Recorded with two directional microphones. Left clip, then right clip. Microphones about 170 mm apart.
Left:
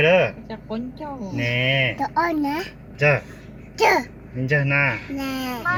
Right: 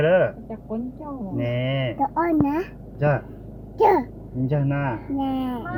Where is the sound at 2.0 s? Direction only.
25° right (ahead or behind).